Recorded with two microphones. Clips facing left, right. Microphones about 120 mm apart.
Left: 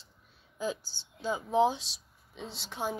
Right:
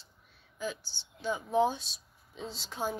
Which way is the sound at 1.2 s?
25° left (ahead or behind).